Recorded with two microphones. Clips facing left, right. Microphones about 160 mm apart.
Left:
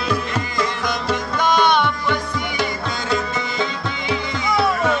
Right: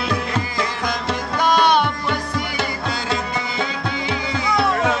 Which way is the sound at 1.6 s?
35° right (ahead or behind).